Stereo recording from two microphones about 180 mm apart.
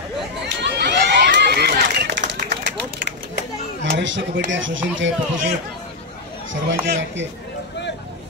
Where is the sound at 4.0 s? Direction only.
90° right.